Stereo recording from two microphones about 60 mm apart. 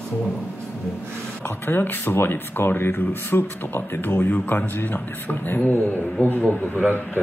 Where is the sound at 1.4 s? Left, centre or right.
Left.